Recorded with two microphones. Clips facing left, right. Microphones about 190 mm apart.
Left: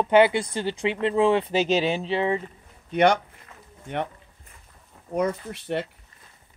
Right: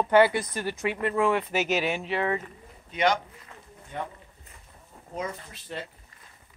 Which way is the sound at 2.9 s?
65° left (ahead or behind).